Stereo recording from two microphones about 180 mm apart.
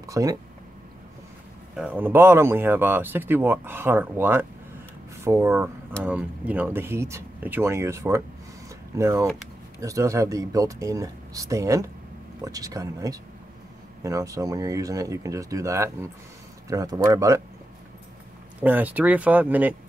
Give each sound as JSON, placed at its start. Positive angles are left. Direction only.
{"t": 0.0, "sound": "speech", "side_deg": -20}
{"t": 1.8, "sound": "speech", "side_deg": -10}
{"t": 18.6, "sound": "speech", "side_deg": -10}